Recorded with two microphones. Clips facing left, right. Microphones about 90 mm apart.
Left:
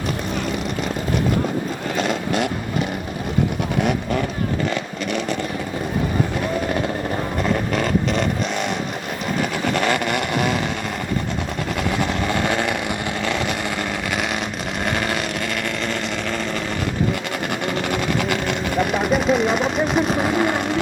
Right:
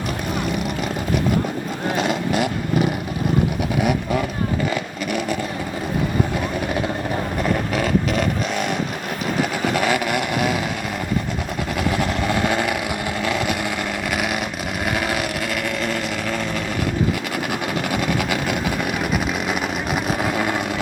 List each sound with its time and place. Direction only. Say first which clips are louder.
2.0 s vehicle: even; 5° right (ahead or behind)
7.4 s vehicle: left 1 dB; 5° right (ahead or behind)
9.7 s vehicle: even; 5° right (ahead or behind)
11.9 s vehicle: even; centre (ahead or behind)
17.9 s vehicle: right 1 dB; 5° right (ahead or behind)